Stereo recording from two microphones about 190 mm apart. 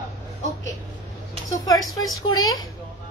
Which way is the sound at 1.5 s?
20° left (ahead or behind).